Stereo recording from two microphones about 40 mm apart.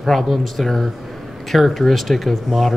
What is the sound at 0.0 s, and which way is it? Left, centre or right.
Speech, centre.